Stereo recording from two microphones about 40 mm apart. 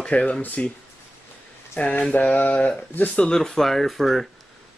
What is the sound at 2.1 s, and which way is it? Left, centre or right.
Mantra, left.